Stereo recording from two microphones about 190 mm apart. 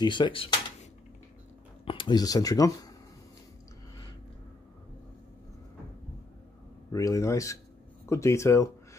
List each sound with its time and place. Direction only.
0.0 s speech: 25° left (ahead or behind)
1.9 s speech: 25° left (ahead or behind)
6.9 s speech: 15° left (ahead or behind)